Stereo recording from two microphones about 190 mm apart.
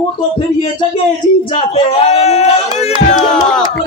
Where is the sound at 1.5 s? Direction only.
35° left (ahead or behind).